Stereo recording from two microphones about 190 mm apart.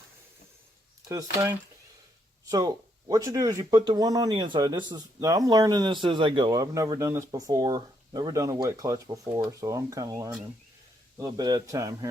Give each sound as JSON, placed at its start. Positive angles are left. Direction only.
{"t": 1.0, "sound": "speech", "side_deg": -15}